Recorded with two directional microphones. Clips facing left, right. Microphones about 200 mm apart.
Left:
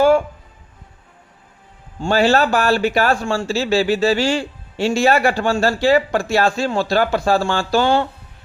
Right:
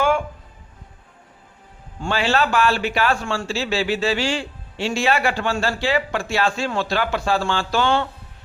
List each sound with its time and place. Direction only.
2.0 s a man's voice: 40° left (ahead or behind)